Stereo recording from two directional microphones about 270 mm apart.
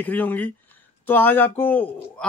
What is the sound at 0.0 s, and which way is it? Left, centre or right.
Speech, centre.